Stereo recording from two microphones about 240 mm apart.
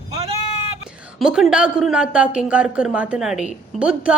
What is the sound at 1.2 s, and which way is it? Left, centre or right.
A woman's voice, centre.